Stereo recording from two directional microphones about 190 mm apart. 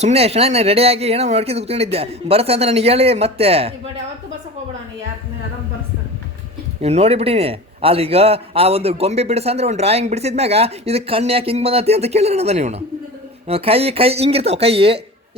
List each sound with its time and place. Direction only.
0.0 s a man's voice: 30° right (ahead or behind)
6.8 s a man's voice: 35° right (ahead or behind)